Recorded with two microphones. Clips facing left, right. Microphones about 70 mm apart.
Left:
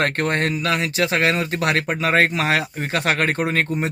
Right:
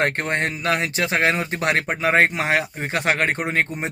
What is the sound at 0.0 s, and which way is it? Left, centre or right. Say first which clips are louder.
Speech: left 1 dB; right.